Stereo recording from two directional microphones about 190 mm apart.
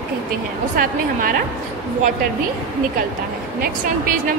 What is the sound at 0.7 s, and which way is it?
Speech, 45° right (ahead or behind).